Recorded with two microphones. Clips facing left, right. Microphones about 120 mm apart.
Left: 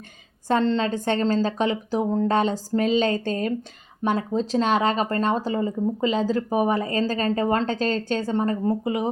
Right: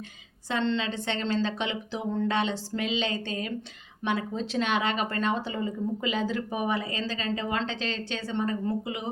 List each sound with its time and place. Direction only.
0.4 s speech: 40° left (ahead or behind)